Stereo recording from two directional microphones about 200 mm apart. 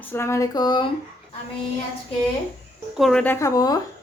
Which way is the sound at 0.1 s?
15° left (ahead or behind).